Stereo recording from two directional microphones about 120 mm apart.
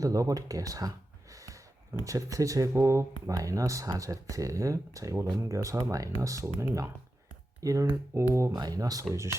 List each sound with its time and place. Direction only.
0.0 s speech: 30° right (ahead or behind)